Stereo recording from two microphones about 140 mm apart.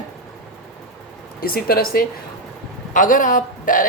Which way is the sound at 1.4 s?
90° left.